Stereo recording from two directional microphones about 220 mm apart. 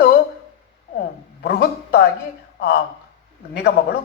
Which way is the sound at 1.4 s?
45° left (ahead or behind).